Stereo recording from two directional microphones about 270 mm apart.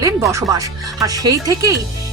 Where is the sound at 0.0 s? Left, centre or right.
Centre.